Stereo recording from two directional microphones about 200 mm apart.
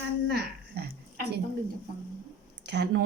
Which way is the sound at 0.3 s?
55° right (ahead or behind).